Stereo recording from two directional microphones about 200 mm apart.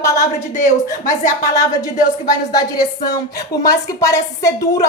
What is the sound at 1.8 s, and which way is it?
A woman's voice, 20° left (ahead or behind).